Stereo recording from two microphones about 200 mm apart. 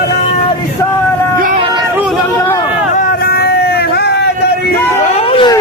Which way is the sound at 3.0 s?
50° left (ahead or behind).